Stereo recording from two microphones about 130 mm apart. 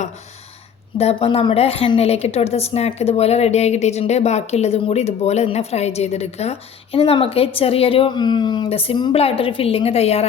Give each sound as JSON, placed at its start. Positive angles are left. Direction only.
{"t": 0.9, "sound": "a woman's voice", "side_deg": 50}